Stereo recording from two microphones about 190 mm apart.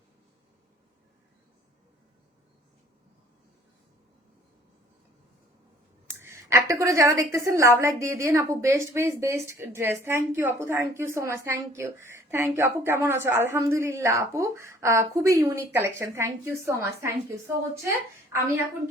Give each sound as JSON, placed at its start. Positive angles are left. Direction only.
{"t": 6.1, "sound": "a woman's voice", "side_deg": -15}